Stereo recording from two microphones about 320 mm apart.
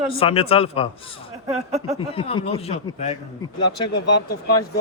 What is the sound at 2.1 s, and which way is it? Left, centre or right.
A man's voice, centre.